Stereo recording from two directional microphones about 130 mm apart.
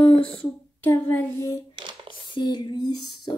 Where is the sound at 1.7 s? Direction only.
40° right (ahead or behind).